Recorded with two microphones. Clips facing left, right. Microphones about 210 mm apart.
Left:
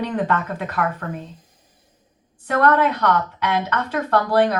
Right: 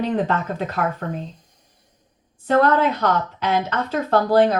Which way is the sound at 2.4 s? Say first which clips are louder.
Right 1 dB; 25° right (ahead or behind).